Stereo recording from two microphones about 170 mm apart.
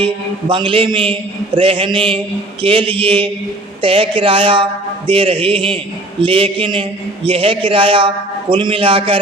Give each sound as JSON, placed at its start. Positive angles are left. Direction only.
{"t": 0.0, "sound": "a man's voice", "side_deg": -30}